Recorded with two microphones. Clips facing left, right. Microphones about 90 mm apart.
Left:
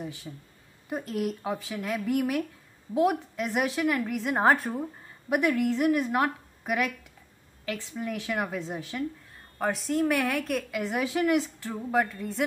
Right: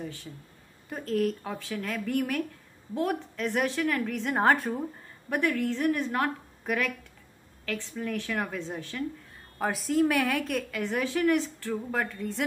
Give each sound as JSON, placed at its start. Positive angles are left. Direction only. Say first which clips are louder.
{"t": 0.0, "sound": "a woman's voice", "louder": "left 1 dB", "side_deg": 10}
{"t": 5.3, "sound": "a woman's voice", "louder": "left 3 dB", "side_deg": 15}
{"t": 9.6, "sound": "a woman's voice", "louder": "right 1 dB", "side_deg": 0}